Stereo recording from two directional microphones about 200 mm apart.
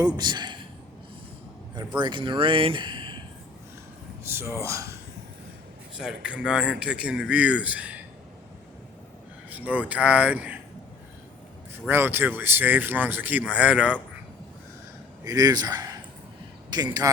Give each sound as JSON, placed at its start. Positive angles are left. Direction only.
{"t": 0.2, "sound": "speech", "side_deg": -20}
{"t": 2.0, "sound": "speech", "side_deg": -25}
{"t": 4.3, "sound": "speech", "side_deg": -10}
{"t": 6.0, "sound": "a man's voice", "side_deg": -5}
{"t": 9.5, "sound": "speech", "side_deg": -5}
{"t": 11.9, "sound": "speech", "side_deg": -10}
{"t": 15.2, "sound": "a man's voice", "side_deg": -20}